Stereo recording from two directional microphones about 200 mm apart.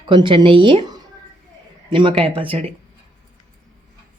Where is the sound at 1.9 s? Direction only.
25° right (ahead or behind).